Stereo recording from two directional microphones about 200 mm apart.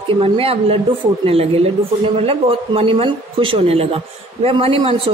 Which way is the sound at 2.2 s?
30° right (ahead or behind).